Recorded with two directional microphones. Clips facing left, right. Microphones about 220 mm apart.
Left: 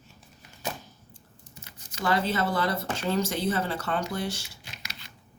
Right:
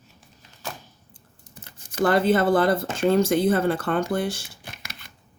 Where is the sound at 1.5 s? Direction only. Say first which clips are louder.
Right 13 dB; 50° right (ahead or behind).